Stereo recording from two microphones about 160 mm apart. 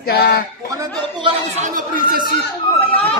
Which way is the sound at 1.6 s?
60° right (ahead or behind).